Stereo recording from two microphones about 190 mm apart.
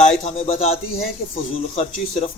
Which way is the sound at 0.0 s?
35° left (ahead or behind).